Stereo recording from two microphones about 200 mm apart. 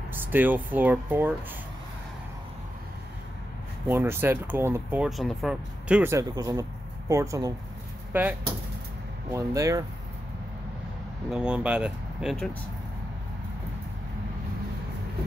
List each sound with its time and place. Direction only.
0.1 s speech: 10° right (ahead or behind)
3.8 s speech: 10° right (ahead or behind)
11.2 s speech: 5° right (ahead or behind)